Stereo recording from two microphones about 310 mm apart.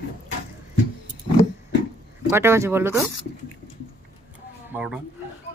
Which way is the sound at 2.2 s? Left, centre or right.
Centre.